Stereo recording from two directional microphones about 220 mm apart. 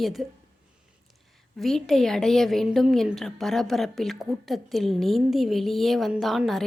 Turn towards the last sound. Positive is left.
turn(degrees=0)  # may be behind; listen again after turning